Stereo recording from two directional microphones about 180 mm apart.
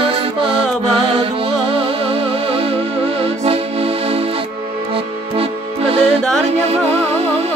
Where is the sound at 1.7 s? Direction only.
30° right (ahead or behind).